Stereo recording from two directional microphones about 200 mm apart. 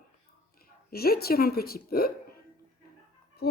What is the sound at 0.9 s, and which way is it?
A woman's voice, 50° left (ahead or behind).